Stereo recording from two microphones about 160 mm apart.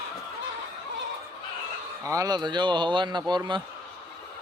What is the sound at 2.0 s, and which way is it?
Speech, 20° right (ahead or behind).